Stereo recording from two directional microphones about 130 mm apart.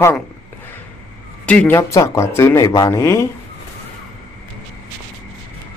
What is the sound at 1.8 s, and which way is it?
Speech, 20° left (ahead or behind).